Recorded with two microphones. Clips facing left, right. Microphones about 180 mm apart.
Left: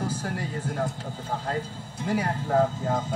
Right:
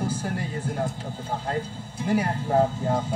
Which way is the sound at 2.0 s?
20° right (ahead or behind).